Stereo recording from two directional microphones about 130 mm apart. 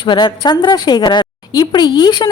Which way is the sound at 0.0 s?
40° left (ahead or behind).